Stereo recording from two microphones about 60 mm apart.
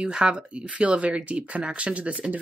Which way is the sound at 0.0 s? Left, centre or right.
Centre.